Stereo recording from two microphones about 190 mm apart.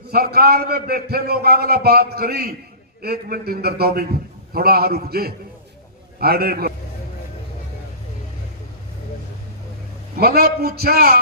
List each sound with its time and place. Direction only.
0.1 s a man's voice: 55° right (ahead or behind)
10.2 s a man's voice: 55° right (ahead or behind)